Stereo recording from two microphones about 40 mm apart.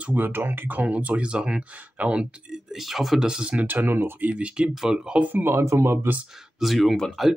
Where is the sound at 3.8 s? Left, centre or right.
Right.